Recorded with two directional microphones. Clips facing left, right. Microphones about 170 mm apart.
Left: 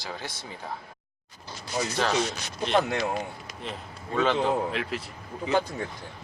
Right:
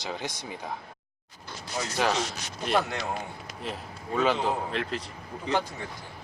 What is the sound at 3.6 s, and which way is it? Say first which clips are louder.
Speech: right 1 dB; centre (ahead or behind).